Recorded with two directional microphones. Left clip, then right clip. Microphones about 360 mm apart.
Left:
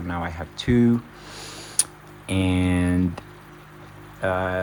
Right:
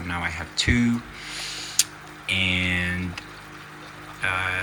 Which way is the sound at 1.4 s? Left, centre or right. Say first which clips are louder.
Right 5 dB; centre.